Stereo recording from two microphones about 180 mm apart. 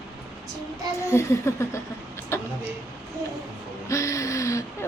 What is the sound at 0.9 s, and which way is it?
Speech, 15° left (ahead or behind).